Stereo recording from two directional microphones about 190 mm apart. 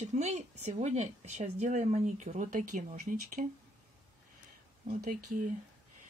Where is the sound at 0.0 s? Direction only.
35° right (ahead or behind).